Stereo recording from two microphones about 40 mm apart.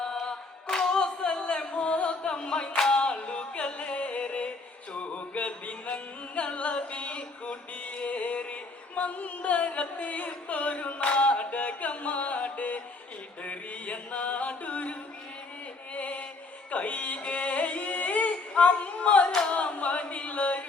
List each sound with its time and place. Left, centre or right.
0.0 s a capella: centre
1.7 s music: left; by 3.0 s centre
3.0 s music: left
13.4 s chant: left
16.7 s yodeling: left
19.5 s singing: left